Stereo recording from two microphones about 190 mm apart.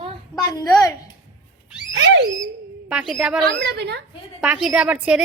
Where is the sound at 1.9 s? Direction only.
75° right (ahead or behind).